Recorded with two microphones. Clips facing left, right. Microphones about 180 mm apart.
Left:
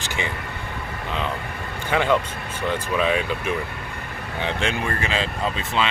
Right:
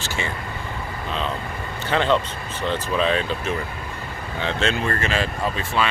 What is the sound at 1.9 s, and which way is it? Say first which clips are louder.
Speech: even; 10° left (ahead or behind).